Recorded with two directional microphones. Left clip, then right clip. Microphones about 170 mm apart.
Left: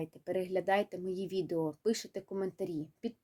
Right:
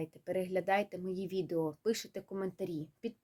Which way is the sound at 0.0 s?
35° left (ahead or behind).